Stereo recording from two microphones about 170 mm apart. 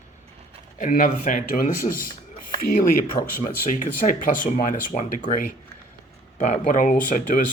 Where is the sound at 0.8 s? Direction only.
50° left (ahead or behind).